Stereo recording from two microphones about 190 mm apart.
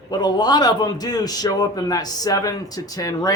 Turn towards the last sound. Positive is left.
turn(degrees=20)  # may be behind; listen again after turning